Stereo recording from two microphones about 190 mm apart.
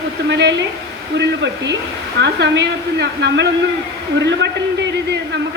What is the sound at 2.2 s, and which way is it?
A woman's voice, 65° right (ahead or behind).